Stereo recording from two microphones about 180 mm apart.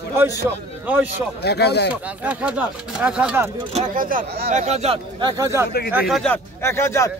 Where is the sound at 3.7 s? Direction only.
45° right (ahead or behind).